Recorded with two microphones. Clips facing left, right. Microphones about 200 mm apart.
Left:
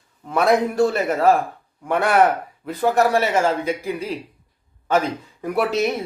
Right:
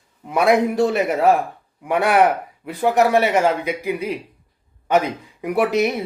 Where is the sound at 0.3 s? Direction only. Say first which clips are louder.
Right 1 dB; 15° right (ahead or behind).